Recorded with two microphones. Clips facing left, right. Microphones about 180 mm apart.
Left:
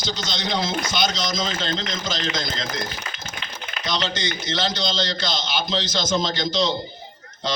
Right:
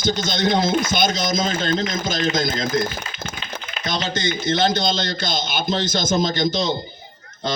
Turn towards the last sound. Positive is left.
turn(degrees=-50)  # may be behind; listen again after turning